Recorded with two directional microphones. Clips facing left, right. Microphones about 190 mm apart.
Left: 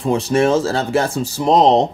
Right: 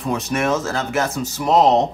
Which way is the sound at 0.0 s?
30° left (ahead or behind).